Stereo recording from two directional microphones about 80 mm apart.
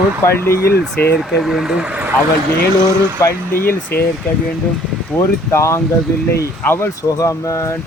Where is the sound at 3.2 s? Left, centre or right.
Left.